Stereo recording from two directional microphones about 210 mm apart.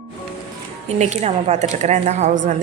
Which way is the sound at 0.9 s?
30° right (ahead or behind).